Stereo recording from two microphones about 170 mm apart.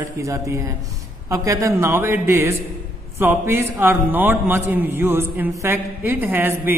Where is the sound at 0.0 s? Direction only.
15° right (ahead or behind).